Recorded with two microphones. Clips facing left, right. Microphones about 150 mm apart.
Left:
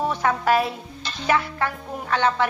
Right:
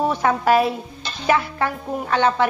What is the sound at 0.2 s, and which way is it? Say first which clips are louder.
A woman's voice: right 3 dB; 20° right (ahead or behind).